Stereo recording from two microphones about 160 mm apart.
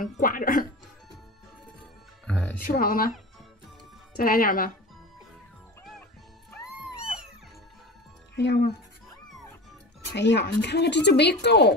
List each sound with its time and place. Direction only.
0.0 s speech: 60° left (ahead or behind)
2.2 s music: 10° left (ahead or behind)
2.6 s speech: 65° left (ahead or behind)
4.2 s speech: 65° left (ahead or behind)
6.6 s cat: 5° right (ahead or behind)
8.4 s speech: 90° left
10.1 s speech: 90° left